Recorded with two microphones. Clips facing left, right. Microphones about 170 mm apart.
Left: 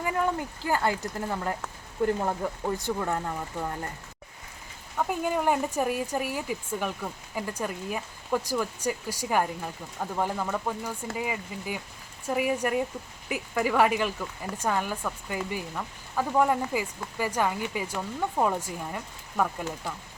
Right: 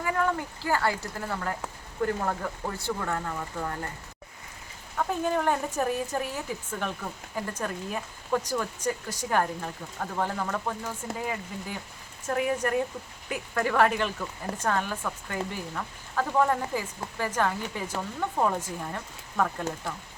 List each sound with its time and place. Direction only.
0.6 s speech: 15° left (ahead or behind)
4.9 s speech: 10° left (ahead or behind)